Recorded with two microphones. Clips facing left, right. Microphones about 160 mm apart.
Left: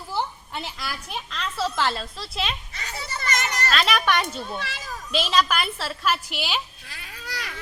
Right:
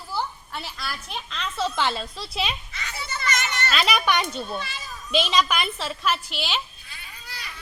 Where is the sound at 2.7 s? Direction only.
40° left (ahead or behind).